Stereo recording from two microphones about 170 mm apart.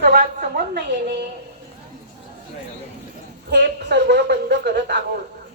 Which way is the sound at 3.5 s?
80° right.